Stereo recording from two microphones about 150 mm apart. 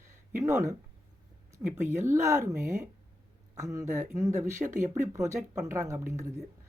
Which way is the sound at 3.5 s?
20° right (ahead or behind).